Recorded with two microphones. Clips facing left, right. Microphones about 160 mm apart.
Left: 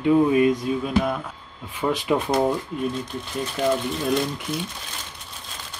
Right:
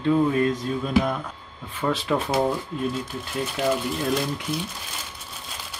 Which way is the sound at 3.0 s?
5° right (ahead or behind).